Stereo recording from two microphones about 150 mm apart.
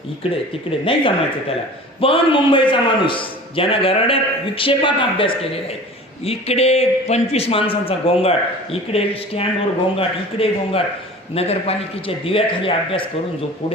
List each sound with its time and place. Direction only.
0.9 s a man's voice: 35° left (ahead or behind)